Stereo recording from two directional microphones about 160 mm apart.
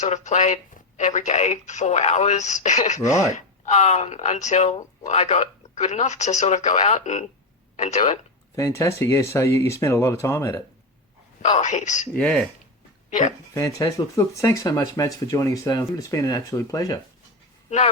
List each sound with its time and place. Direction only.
0.0 s speech: 45° left (ahead or behind)
8.5 s speech: 20° left (ahead or behind)
11.4 s speech: 45° left (ahead or behind)
12.1 s speech: 5° left (ahead or behind)
13.5 s speech: 20° left (ahead or behind)